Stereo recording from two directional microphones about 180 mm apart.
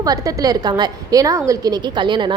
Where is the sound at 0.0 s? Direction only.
20° right (ahead or behind).